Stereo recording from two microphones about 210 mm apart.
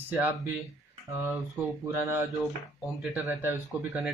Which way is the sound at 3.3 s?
10° right (ahead or behind).